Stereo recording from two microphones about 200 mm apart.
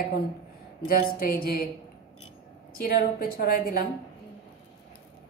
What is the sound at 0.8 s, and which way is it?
Speech, 45° left (ahead or behind).